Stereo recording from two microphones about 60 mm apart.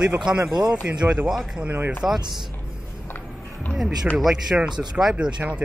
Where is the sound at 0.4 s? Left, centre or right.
Right.